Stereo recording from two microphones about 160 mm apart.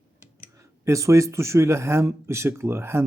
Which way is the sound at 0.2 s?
20° right (ahead or behind).